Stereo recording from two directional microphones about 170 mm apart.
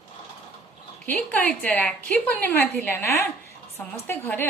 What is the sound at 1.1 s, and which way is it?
A woman's voice, 10° left (ahead or behind).